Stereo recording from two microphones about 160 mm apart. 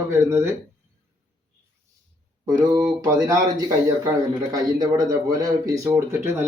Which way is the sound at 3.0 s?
20° right (ahead or behind).